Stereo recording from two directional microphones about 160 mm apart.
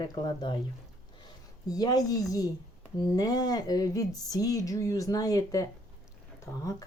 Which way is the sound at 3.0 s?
25° left (ahead or behind).